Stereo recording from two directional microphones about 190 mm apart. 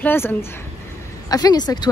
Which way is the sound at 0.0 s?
10° left (ahead or behind).